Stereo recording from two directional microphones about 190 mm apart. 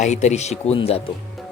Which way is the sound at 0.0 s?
40° left (ahead or behind).